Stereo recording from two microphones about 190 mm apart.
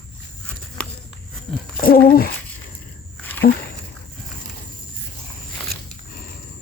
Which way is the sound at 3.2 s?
10° left (ahead or behind).